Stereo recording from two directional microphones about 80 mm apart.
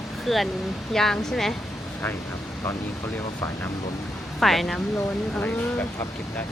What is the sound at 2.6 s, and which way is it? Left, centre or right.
Speech, left.